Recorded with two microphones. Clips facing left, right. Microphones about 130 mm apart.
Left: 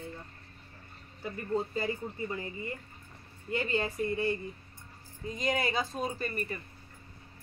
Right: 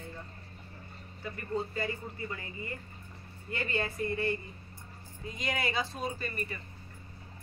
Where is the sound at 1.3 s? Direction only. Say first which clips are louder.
Left 3 dB; 25° left (ahead or behind).